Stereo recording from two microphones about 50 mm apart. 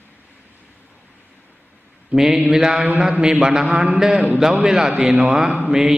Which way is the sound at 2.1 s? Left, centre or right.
Centre.